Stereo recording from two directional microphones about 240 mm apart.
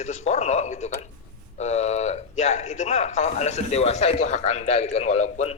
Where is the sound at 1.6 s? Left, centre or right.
Left.